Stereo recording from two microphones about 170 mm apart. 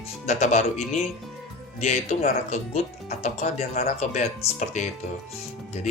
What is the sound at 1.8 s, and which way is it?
Speech, 40° left (ahead or behind).